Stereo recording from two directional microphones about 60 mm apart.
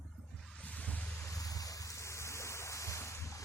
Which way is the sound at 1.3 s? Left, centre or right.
Left.